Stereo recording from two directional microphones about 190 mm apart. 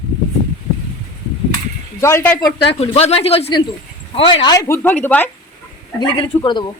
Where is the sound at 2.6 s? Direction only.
30° left (ahead or behind); by 5.3 s 10° left (ahead or behind).